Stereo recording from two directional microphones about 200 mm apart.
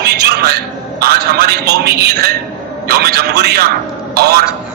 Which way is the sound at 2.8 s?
50° right (ahead or behind).